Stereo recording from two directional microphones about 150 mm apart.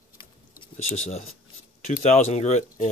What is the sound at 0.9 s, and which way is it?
Speech, 45° left (ahead or behind).